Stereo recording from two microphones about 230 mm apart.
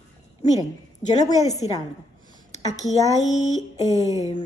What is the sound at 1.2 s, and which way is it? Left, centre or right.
Speech, centre.